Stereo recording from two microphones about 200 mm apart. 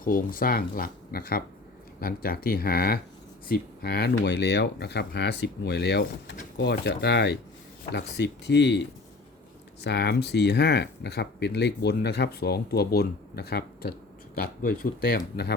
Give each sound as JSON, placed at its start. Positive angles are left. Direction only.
{"t": 0.0, "sound": "speech", "side_deg": 45}